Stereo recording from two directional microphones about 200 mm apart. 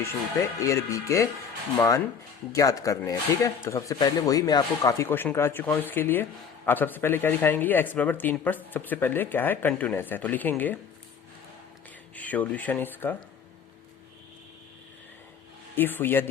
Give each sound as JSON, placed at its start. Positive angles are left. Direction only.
{"t": 0.0, "sound": "speech", "side_deg": 15}
{"t": 12.1, "sound": "speech", "side_deg": 10}
{"t": 15.7, "sound": "speech", "side_deg": 10}